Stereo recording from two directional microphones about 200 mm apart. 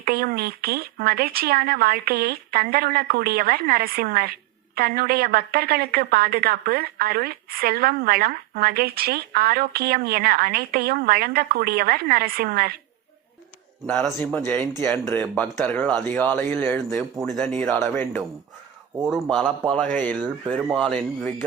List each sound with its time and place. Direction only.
0.0 s speech: 50° right (ahead or behind)
13.8 s speech: 5° left (ahead or behind)
17.2 s speech: centre (ahead or behind)
19.0 s speech: centre (ahead or behind)